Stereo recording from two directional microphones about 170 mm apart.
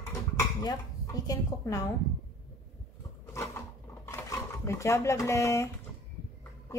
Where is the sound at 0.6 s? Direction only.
20° left (ahead or behind).